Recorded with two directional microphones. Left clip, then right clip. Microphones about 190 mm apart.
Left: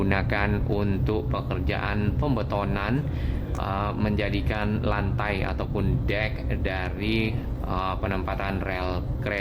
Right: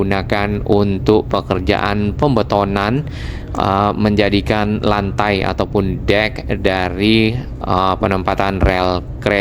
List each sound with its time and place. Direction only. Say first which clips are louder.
0.1 s speech: right 8 dB; 35° right (ahead or behind)